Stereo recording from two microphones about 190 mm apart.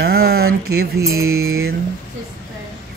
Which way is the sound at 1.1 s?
90° right.